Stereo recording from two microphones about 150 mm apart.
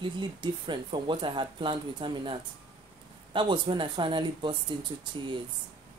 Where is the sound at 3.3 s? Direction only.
30° right (ahead or behind).